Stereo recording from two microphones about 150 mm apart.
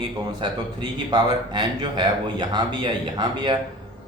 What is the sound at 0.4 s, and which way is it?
Speech, 30° right (ahead or behind).